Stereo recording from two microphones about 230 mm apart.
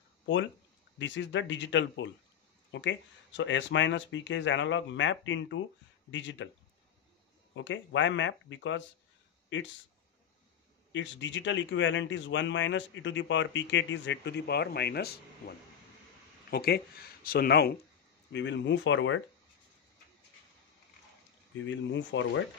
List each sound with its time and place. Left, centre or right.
0.9 s speech: left
7.5 s speech: left
10.9 s speech: left
21.6 s speech: left